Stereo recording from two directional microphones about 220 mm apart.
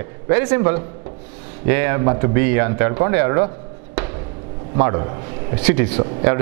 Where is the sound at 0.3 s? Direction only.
10° right (ahead or behind).